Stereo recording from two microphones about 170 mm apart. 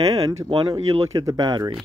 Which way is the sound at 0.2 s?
20° right (ahead or behind).